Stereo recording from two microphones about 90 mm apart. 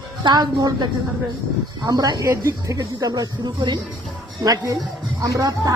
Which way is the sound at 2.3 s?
30° right (ahead or behind).